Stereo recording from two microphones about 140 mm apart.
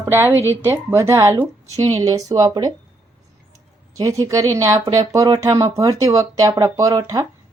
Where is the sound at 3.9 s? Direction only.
25° right (ahead or behind).